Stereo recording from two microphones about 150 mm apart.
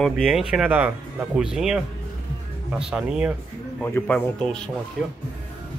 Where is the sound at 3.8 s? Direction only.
10° left (ahead or behind).